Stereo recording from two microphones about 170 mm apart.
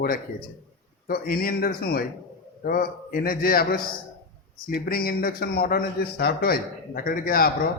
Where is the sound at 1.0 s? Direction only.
60° left (ahead or behind).